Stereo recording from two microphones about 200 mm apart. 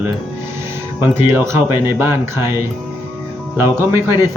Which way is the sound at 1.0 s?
10° right (ahead or behind).